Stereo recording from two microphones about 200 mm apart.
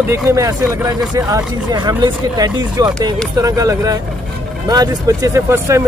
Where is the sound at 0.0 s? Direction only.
15° right (ahead or behind).